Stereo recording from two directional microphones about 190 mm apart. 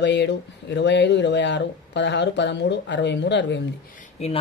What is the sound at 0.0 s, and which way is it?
Speech, 65° left (ahead or behind).